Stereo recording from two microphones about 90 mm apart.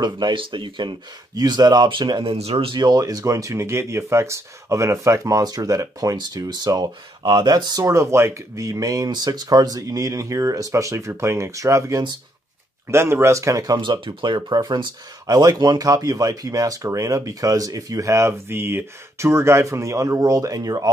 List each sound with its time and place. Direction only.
0.0 s speech: 60° right (ahead or behind)
2.5 s speech: 90° right
2.8 s speech: 45° right (ahead or behind)
7.8 s speech: 35° right (ahead or behind)
13.7 s speech: 65° right (ahead or behind); by 20.9 s 45° right (ahead or behind)